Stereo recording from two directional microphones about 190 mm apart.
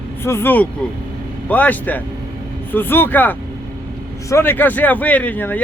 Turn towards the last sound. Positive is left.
turn(degrees=10)  # may be behind; listen again after turning